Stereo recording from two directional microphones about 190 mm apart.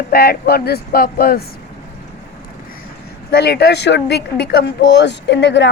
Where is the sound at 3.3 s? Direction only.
55° left (ahead or behind).